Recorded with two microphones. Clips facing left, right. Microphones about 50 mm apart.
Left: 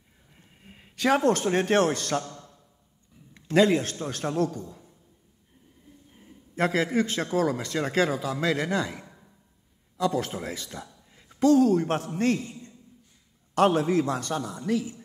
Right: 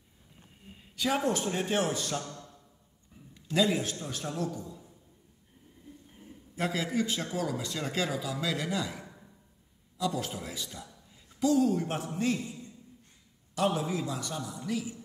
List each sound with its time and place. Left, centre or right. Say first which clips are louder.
0.7 s a man's voice: left 7 dB; left
3.3 s a man's voice: left 7 dB; left
6.5 s a man's voice: left 7 dB; left
13.6 s a man's voice: left 8 dB; left